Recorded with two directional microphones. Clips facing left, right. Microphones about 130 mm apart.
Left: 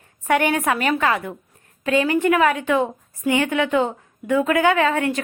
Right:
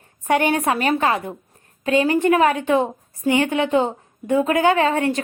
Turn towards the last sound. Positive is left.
turn(degrees=-30)  # may be behind; listen again after turning